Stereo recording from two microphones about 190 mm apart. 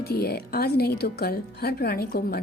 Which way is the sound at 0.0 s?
55° left (ahead or behind).